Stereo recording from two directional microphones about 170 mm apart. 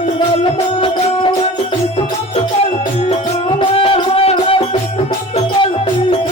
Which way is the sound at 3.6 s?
30° left (ahead or behind).